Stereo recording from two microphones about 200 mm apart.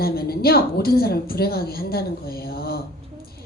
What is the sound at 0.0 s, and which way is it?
A woman's voice, 50° left (ahead or behind).